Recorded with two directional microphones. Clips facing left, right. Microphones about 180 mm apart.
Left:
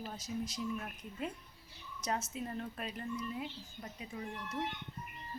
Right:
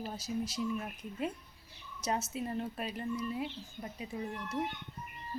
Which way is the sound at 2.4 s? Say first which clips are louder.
Right 4 dB; 25° right (ahead or behind).